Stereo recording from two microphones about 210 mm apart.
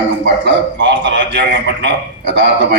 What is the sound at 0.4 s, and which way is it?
Speech, 60° right (ahead or behind).